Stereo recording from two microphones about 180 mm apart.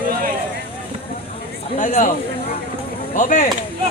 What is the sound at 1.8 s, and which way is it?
Speech, 45° left (ahead or behind).